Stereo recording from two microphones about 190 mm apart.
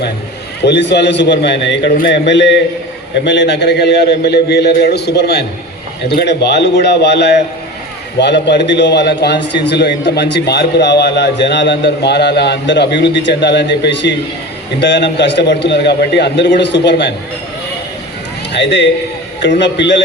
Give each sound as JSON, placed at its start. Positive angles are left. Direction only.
{"t": 0.6, "sound": "a man's voice", "side_deg": 65}
{"t": 18.5, "sound": "a man's voice", "side_deg": 70}